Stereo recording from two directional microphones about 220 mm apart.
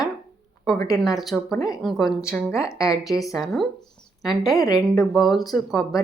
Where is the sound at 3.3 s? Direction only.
Centre (ahead or behind).